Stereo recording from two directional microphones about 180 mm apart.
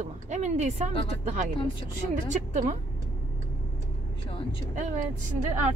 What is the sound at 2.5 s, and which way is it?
Speech, 45° right (ahead or behind).